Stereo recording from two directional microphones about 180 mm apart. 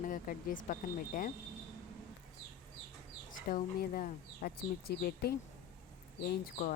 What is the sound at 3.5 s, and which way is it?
Speech, 50° left (ahead or behind).